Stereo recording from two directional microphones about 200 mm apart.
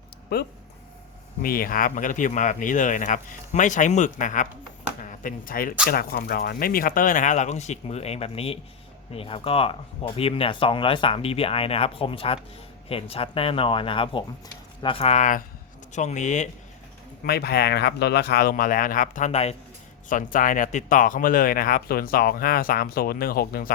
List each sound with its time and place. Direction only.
0.3 s speech: 55° left (ahead or behind); by 16.5 s 35° left (ahead or behind)
17.2 s speech: 50° left (ahead or behind)